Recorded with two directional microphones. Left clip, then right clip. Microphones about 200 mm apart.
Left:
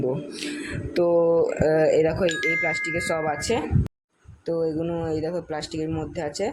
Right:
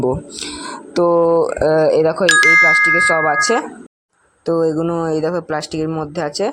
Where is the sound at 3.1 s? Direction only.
25° right (ahead or behind).